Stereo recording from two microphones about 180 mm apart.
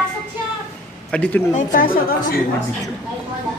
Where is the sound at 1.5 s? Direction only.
50° left (ahead or behind).